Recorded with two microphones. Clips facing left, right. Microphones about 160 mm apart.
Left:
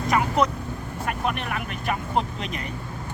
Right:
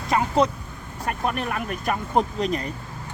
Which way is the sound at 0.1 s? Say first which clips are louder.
Right 2 dB; 30° right (ahead or behind).